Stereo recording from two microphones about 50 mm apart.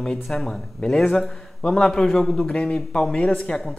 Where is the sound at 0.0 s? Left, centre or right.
Centre.